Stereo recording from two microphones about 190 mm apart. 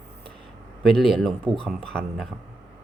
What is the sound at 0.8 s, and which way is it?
Speech, centre (ahead or behind).